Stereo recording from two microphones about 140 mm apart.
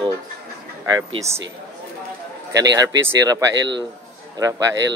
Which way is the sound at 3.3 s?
25° right (ahead or behind).